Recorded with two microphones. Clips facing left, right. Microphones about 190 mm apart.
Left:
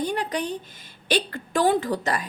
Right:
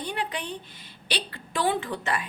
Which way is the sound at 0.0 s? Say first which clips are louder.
Left 6 dB; 40° left (ahead or behind).